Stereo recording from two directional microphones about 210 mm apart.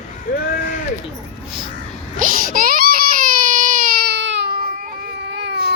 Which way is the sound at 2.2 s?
40° right (ahead or behind).